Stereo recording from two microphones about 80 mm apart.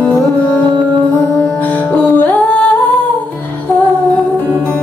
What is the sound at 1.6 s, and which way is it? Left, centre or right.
Music, centre.